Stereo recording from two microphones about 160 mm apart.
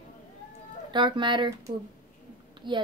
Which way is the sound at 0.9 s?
30° right (ahead or behind).